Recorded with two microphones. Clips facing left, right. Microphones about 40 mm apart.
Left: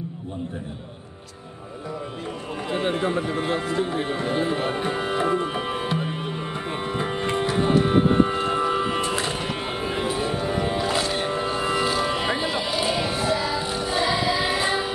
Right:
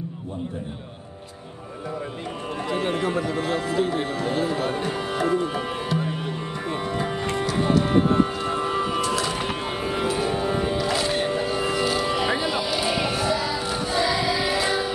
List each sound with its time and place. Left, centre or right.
2.7 s speech: left
6.7 s music: left
13.3 s child singing: left
13.8 s music: left